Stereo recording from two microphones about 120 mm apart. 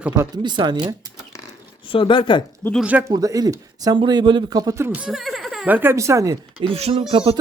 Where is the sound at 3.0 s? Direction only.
30° right (ahead or behind).